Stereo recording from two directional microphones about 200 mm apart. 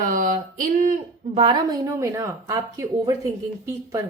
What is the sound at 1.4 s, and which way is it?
A woman's voice, 25° right (ahead or behind).